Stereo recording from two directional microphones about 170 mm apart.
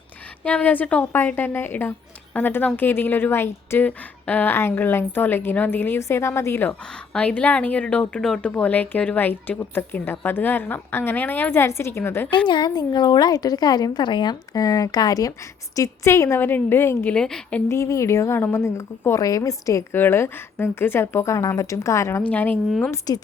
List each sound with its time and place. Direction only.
0.4 s a woman's voice: 10° left (ahead or behind)
12.5 s a woman's voice: 25° left (ahead or behind); by 17.6 s 5° left (ahead or behind)
17.7 s a woman's voice: 20° left (ahead or behind)
22.9 s a woman's voice: 20° left (ahead or behind)